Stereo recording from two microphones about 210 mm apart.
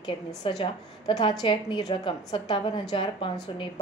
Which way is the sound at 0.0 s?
20° left (ahead or behind).